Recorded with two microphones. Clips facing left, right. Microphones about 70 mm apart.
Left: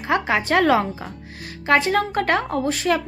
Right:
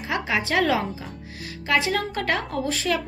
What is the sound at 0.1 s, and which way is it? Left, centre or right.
A woman's voice, left.